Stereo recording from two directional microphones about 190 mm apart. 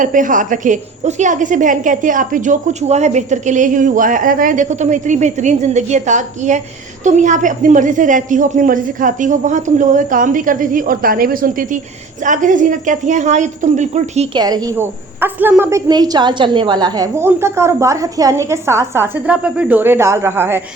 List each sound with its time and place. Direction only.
0.0 s a woman's voice: 45° right (ahead or behind)
14.3 s a woman's voice: 20° right (ahead or behind)